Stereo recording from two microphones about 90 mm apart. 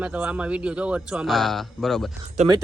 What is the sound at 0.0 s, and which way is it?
Speech, 10° right (ahead or behind).